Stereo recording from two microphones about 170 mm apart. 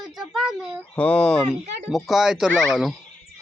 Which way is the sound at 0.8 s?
10° left (ahead or behind).